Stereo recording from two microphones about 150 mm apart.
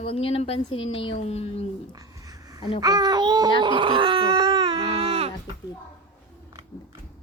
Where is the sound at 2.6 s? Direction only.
40° left (ahead or behind).